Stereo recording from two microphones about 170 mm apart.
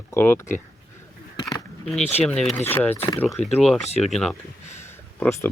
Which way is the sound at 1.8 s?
Centre (ahead or behind).